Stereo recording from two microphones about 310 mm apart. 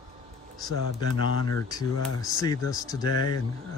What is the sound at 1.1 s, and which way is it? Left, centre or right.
Speech, left.